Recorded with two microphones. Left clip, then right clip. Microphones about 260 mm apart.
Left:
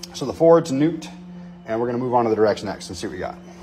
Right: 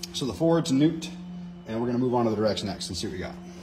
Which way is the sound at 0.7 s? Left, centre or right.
Centre.